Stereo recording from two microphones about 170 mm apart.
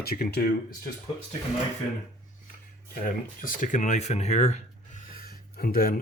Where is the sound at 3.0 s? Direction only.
50° left (ahead or behind).